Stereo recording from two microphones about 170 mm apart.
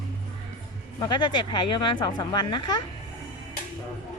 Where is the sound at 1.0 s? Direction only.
25° left (ahead or behind).